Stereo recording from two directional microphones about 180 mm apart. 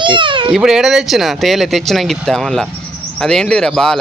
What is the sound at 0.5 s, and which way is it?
Speech, centre (ahead or behind).